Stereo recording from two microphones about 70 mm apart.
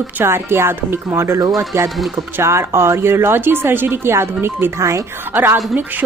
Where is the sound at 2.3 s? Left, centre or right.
Right.